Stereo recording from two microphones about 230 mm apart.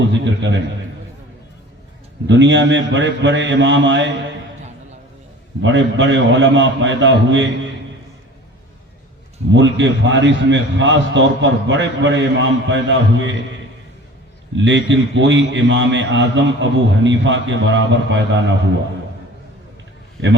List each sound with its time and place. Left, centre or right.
0.1 s a man's voice: right
2.2 s a man's voice: right
5.6 s a man's voice: right
9.5 s a man's voice: right
14.5 s a man's voice: right